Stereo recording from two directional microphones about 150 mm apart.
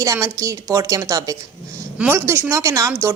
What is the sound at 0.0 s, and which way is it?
A woman's voice, 20° right (ahead or behind).